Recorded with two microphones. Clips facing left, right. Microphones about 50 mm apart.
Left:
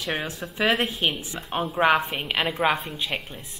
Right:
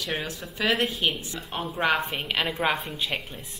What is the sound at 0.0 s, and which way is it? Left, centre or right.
Speech, centre.